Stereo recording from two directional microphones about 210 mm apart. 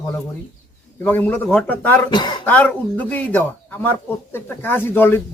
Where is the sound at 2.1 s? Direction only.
20° left (ahead or behind).